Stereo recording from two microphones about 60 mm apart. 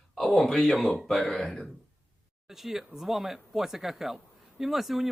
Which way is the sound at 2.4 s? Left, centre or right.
Centre.